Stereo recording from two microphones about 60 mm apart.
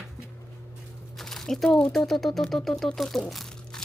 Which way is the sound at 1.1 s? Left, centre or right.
Centre.